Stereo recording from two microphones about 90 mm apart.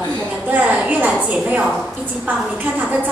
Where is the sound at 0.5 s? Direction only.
15° right (ahead or behind).